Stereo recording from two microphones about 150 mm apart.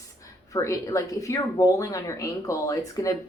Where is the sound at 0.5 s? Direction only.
20° left (ahead or behind).